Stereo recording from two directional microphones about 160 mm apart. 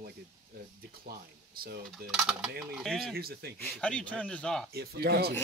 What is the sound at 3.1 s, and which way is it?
Speech, 75° right (ahead or behind).